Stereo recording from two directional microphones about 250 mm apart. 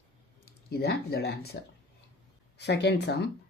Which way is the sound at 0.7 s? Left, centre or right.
Left.